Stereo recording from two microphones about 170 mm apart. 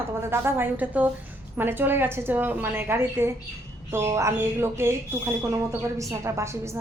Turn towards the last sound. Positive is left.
turn(degrees=-15)  # may be behind; listen again after turning